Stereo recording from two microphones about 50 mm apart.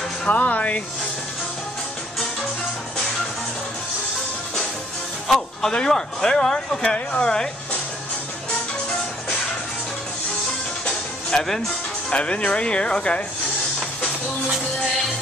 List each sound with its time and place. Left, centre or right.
0.3 s speech: left
5.3 s speech: centre
11.2 s speech: centre
12.1 s speech: left